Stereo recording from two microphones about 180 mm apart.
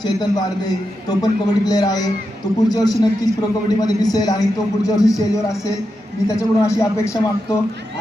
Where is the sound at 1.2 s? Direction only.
20° left (ahead or behind).